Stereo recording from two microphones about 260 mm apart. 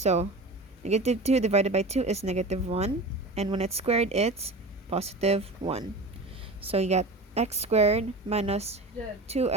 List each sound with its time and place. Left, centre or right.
0.0 s speech: right